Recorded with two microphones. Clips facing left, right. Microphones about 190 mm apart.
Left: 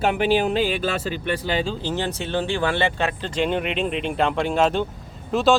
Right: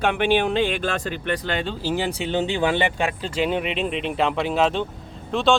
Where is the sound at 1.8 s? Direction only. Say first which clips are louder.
Right 2 dB; 10° right (ahead or behind).